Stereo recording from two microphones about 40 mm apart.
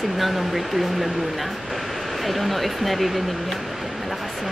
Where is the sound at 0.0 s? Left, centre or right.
Centre.